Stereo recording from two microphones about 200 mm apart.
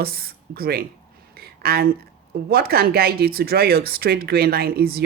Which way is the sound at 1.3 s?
50° right (ahead or behind).